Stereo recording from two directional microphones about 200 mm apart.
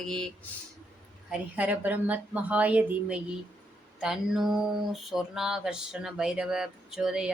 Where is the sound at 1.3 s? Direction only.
5° right (ahead or behind).